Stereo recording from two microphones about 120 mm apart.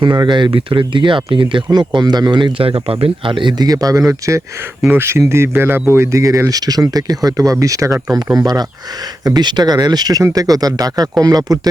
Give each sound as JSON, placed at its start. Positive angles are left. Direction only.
{"t": 0.0, "sound": "speech", "side_deg": -40}